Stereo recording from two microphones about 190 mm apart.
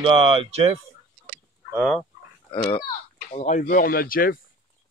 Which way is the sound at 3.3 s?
40° left (ahead or behind).